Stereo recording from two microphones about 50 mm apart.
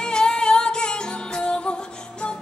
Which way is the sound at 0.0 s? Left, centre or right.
Centre.